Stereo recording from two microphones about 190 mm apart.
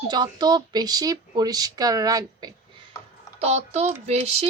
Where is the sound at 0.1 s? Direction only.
20° right (ahead or behind).